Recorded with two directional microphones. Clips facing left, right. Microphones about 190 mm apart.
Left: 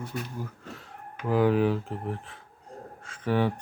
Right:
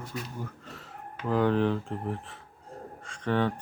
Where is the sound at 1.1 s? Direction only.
10° left (ahead or behind).